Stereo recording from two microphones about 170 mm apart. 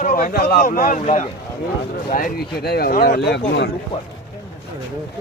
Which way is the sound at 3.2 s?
80° left.